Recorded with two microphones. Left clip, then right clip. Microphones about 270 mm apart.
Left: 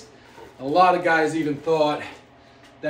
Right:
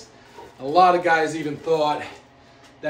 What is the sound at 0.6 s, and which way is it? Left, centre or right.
A man's voice, centre.